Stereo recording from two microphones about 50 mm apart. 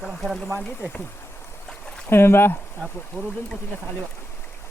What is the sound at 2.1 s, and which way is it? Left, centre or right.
Speech, left.